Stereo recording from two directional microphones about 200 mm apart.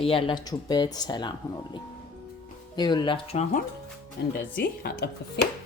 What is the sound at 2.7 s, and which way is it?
Speech, 20° left (ahead or behind).